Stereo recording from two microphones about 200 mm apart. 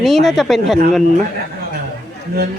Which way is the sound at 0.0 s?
Centre (ahead or behind).